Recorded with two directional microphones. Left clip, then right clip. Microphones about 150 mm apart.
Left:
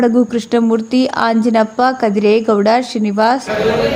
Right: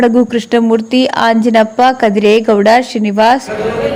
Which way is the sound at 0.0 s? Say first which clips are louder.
Right 3 dB; 20° right (ahead or behind).